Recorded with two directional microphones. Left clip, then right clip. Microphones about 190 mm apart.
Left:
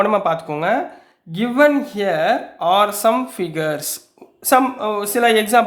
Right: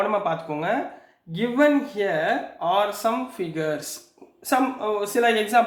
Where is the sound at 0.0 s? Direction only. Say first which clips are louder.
Left 7 dB; 50° left (ahead or behind).